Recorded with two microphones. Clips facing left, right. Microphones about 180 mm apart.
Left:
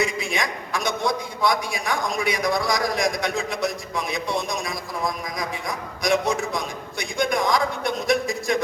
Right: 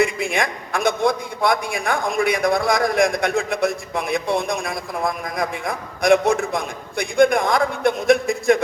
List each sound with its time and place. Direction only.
0.0 s a man's voice: 55° right (ahead or behind)